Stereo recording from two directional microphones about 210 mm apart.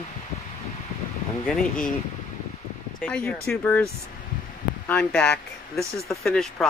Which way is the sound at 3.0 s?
5° left (ahead or behind).